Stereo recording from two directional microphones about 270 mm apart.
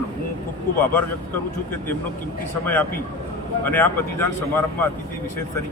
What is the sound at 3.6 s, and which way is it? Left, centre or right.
Speech, centre.